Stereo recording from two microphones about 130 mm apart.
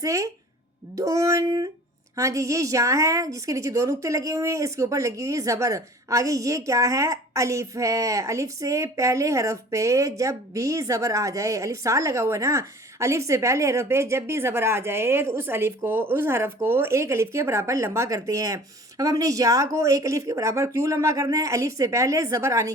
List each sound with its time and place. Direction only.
0.0 s a woman's voice: 25° right (ahead or behind)